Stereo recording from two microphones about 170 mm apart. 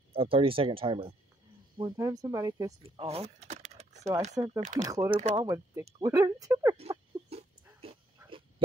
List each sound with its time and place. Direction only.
0.1 s speech: 35° right (ahead or behind)
2.8 s typing: 35° right (ahead or behind)
4.6 s speech: 45° right (ahead or behind)
4.8 s speech: 20° right (ahead or behind)
6.8 s a sound: 35° right (ahead or behind)
7.9 s dog: 35° right (ahead or behind)